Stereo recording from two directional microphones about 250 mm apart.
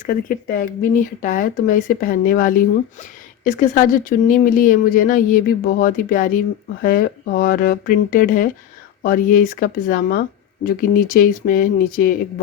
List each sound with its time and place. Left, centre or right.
0.1 s speech: left